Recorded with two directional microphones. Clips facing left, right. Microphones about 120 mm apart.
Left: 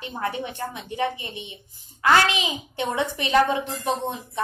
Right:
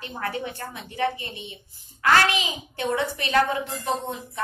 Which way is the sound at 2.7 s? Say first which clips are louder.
Right 1 dB; 20° left (ahead or behind).